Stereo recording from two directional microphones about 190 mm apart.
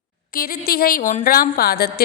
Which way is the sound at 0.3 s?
50° left (ahead or behind).